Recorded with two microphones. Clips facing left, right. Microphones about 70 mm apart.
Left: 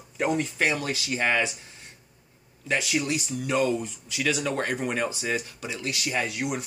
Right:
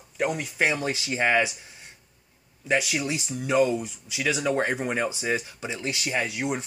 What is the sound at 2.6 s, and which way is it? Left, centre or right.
Speech, centre.